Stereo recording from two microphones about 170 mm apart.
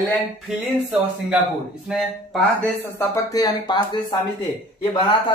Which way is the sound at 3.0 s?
20° left (ahead or behind).